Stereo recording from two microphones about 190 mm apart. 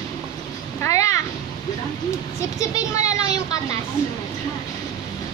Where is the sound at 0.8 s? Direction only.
15° left (ahead or behind).